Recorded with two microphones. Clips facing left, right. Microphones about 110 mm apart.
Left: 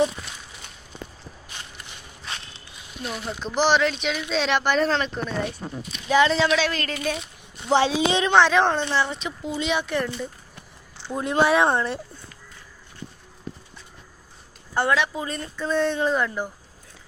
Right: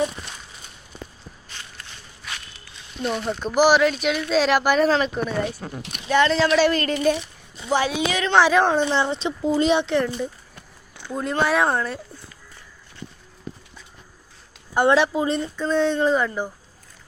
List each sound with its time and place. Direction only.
3.0 s speech: centre (ahead or behind)
3.4 s speech: 10° right (ahead or behind)
7.7 s a woman's voice: 25° left (ahead or behind)
8.3 s speech: 5° right (ahead or behind)
8.9 s speech: 25° right (ahead or behind)
9.8 s speech: 15° right (ahead or behind)
11.1 s speech: 5° left (ahead or behind)
14.8 s speech: 30° right (ahead or behind)
15.6 s speech: 5° left (ahead or behind)